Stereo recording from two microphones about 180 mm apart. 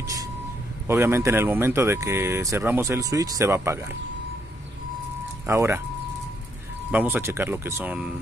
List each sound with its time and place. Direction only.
0.0 s a sound: 20° right (ahead or behind)
0.8 s speech: 15° right (ahead or behind)
5.5 s speech: 15° right (ahead or behind)
6.9 s speech: 10° right (ahead or behind)